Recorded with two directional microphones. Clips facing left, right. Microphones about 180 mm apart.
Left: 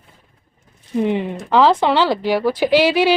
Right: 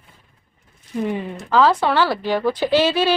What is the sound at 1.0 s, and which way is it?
Speech, 20° left (ahead or behind).